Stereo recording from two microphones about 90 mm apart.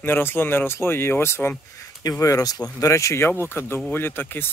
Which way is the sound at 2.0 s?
40° left (ahead or behind).